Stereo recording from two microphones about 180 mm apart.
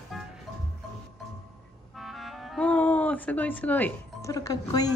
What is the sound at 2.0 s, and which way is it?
Music, centre (ahead or behind).